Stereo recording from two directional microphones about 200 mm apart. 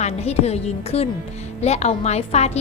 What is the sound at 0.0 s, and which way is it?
A woman's voice, 30° left (ahead or behind).